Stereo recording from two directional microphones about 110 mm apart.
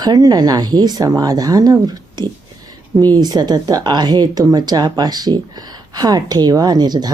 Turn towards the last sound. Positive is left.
turn(degrees=-40)  # may be behind; listen again after turning